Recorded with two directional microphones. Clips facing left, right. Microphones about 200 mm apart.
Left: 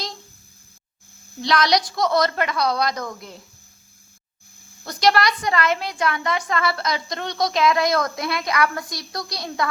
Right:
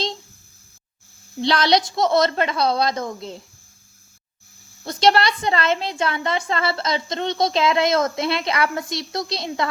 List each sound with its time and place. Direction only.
1.4 s a woman's voice: 30° right (ahead or behind)
4.8 s a woman's voice: 25° right (ahead or behind)